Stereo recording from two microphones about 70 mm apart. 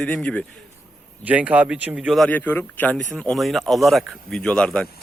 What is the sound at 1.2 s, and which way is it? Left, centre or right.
Speech, right.